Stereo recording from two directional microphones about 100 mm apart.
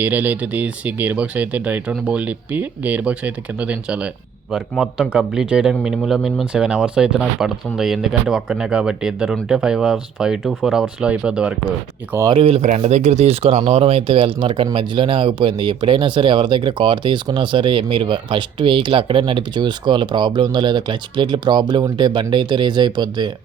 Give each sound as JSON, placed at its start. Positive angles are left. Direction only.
{"t": 0.0, "sound": "speech", "side_deg": -15}
{"t": 12.3, "sound": "speech", "side_deg": -70}